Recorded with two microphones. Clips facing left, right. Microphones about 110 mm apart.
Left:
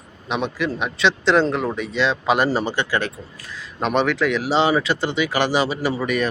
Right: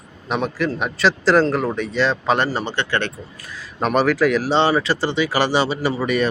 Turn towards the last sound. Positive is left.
turn(degrees=0)  # may be behind; listen again after turning